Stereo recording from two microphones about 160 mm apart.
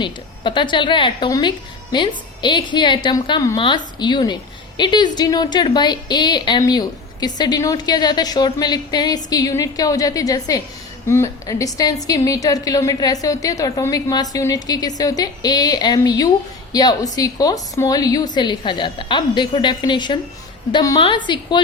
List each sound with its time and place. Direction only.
0.0 s a woman's voice: 30° left (ahead or behind)